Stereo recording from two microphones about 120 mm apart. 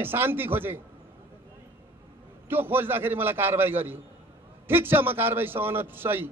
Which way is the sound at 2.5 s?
15° right (ahead or behind).